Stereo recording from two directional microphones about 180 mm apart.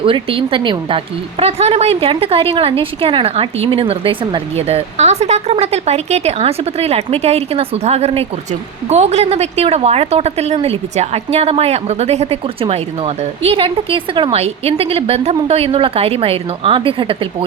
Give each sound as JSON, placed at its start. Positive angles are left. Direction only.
{"t": 0.0, "sound": "a woman's voice", "side_deg": -30}